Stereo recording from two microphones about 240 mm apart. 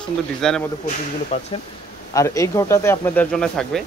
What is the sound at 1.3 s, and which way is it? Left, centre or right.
Speech, left.